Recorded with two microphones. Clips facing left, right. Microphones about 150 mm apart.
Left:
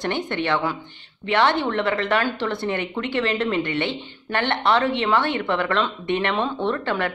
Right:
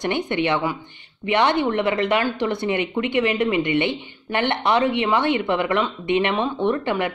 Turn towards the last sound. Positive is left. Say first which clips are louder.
# right 2 dB
turn(degrees=-15)  # may be behind; listen again after turning